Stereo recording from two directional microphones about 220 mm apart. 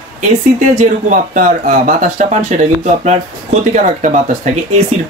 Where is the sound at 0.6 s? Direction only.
35° right (ahead or behind).